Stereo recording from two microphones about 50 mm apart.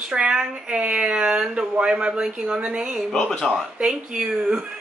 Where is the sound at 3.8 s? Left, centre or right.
Centre.